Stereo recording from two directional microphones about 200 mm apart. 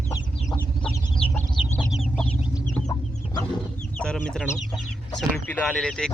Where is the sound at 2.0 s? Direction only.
5° right (ahead or behind).